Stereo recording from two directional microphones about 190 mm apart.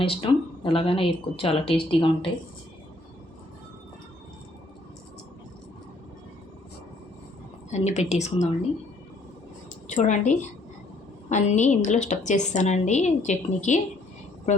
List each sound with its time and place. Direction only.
0.0 s speech: 30° left (ahead or behind)
7.7 s a woman's voice: 35° left (ahead or behind)
9.8 s a woman's voice: 40° left (ahead or behind)